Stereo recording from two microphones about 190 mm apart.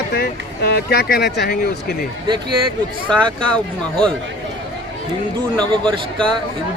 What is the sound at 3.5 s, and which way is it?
Speech, 5° left (ahead or behind).